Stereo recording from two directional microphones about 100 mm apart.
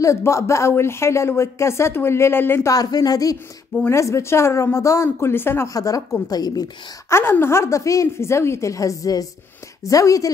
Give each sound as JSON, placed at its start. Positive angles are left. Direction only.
{"t": 0.0, "sound": "a woman's voice", "side_deg": 30}
{"t": 2.7, "sound": "a woman's voice", "side_deg": 40}
{"t": 7.1, "sound": "a woman's voice", "side_deg": 25}